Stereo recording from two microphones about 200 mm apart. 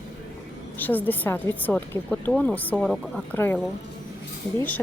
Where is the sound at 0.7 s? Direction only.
10° left (ahead or behind).